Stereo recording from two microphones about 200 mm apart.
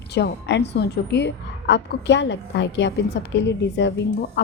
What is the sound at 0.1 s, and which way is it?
Speech, 60° left (ahead or behind).